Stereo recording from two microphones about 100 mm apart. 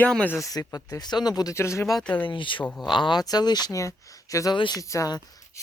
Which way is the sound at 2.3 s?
55° left (ahead or behind).